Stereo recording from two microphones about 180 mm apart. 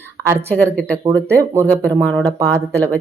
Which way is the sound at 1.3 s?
15° right (ahead or behind).